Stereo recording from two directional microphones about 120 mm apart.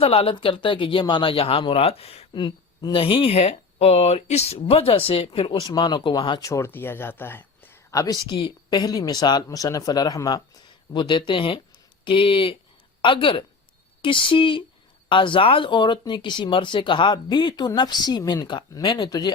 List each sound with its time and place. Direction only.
0.0 s speech: 50° left (ahead or behind)
2.3 s speech: 40° left (ahead or behind)
6.4 s speech: 25° left (ahead or behind)